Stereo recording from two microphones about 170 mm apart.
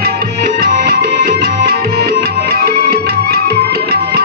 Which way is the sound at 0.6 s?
60° right (ahead or behind).